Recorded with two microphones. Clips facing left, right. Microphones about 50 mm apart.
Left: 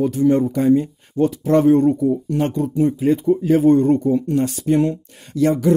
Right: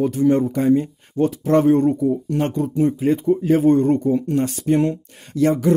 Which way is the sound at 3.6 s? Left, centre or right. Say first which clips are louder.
Left 3 dB; right.